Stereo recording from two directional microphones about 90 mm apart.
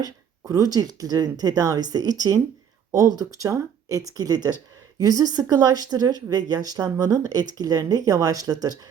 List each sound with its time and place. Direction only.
0.0 s speech: 40° right (ahead or behind)